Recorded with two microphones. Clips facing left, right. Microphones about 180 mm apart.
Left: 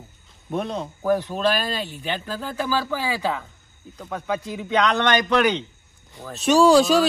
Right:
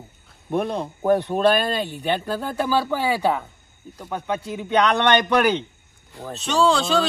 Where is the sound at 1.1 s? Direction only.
60° right (ahead or behind).